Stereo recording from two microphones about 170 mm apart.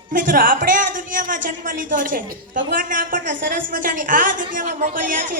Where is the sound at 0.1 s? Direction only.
55° right (ahead or behind).